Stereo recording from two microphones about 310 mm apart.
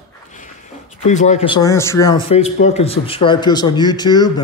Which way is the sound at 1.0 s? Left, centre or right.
Left.